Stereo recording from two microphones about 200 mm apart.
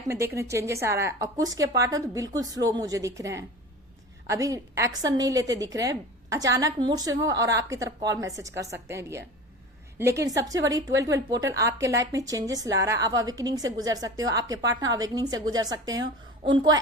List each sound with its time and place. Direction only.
0.1 s a woman's voice: 15° right (ahead or behind)